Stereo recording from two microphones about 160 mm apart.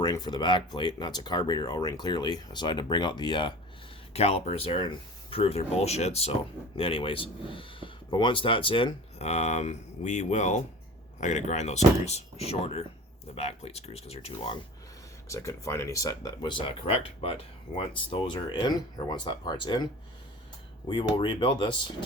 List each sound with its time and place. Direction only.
0.0 s speech: 25° left (ahead or behind)
4.1 s speech: 40° left (ahead or behind)
15.3 s speech: 20° left (ahead or behind)